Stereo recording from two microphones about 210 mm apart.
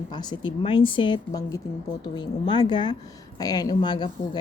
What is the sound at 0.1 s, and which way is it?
Speech, 20° left (ahead or behind).